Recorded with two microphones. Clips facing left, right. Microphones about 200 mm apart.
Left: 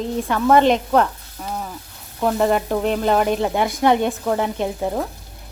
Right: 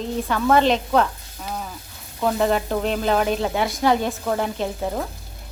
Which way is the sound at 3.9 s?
15° left (ahead or behind).